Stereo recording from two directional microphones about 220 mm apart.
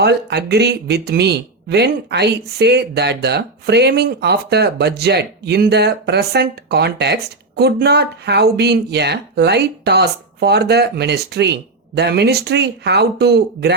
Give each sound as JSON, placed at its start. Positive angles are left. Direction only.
{"t": 0.0, "sound": "speech", "side_deg": -50}